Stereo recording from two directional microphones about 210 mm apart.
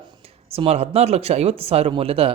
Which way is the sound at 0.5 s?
30° right (ahead or behind).